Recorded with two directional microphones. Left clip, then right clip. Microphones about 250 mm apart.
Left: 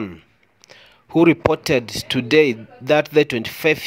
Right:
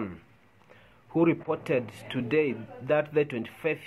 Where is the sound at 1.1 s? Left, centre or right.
Left.